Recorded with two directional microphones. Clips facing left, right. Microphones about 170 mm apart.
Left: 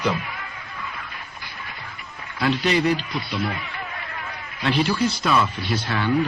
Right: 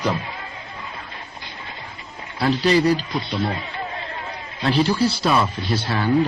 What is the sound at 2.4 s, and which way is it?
Speech, 35° right (ahead or behind).